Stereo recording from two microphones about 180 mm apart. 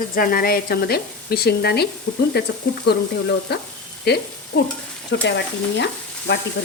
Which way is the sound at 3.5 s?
65° left (ahead or behind).